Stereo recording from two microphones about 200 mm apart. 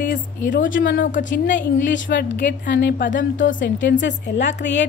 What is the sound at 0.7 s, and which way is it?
Speech, 70° left (ahead or behind).